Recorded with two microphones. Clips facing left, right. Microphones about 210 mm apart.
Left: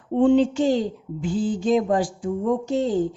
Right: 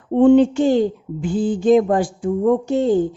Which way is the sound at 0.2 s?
55° right (ahead or behind).